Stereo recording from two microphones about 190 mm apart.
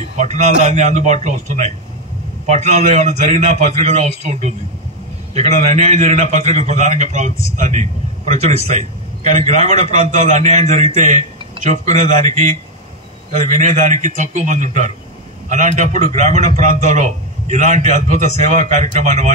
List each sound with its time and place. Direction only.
0.2 s a man's voice: 40° right (ahead or behind)